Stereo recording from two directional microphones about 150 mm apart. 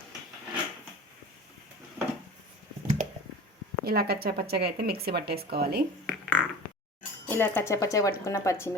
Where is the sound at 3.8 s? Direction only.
90° right.